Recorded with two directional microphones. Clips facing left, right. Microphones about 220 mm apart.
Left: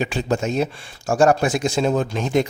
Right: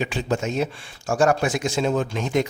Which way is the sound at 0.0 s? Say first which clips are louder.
Left 3 dB; 40° left (ahead or behind).